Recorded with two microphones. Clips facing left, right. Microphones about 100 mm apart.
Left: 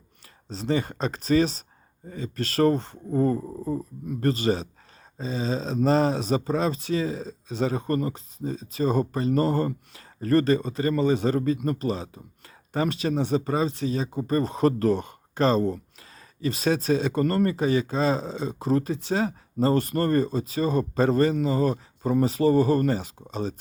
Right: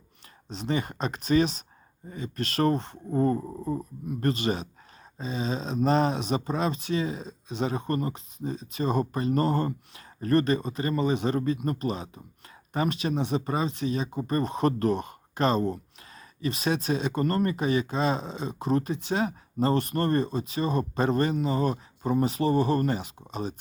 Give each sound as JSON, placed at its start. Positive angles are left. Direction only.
{"t": 0.4, "sound": "speech", "side_deg": 35}
{"t": 3.1, "sound": "speech", "side_deg": -30}
{"t": 4.2, "sound": "speech", "side_deg": 35}